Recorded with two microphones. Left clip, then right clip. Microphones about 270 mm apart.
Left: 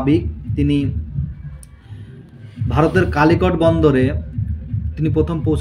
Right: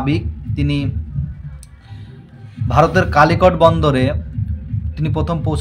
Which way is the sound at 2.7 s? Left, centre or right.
Right.